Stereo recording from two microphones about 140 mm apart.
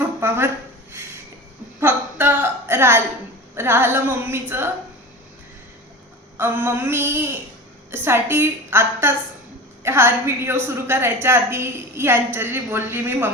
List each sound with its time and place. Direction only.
0.2 s a woman's voice: 15° right (ahead or behind)
1.8 s a sound: 15° right (ahead or behind)
3.5 s a woman's voice: 15° right (ahead or behind)
6.3 s a woman's voice: 15° right (ahead or behind)